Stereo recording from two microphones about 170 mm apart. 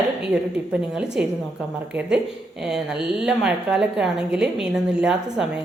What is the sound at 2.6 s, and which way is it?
A woman's voice, 5° right (ahead or behind).